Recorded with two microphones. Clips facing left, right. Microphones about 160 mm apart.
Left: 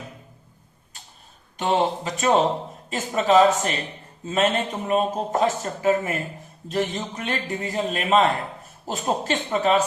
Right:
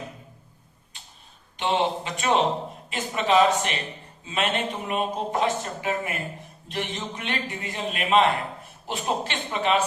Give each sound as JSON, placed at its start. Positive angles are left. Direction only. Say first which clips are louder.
{"t": 1.5, "sound": "a man's voice", "louder": "left 2 dB", "side_deg": 40}